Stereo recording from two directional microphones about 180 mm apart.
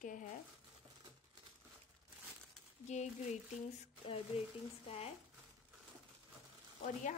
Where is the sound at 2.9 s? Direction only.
40° left (ahead or behind).